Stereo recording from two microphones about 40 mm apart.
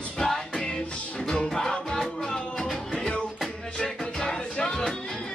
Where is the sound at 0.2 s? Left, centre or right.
Centre.